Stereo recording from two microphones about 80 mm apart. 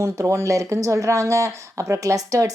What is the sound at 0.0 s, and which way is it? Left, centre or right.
Speech, right.